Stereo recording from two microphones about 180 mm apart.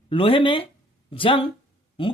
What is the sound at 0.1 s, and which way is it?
Speech, 30° left (ahead or behind).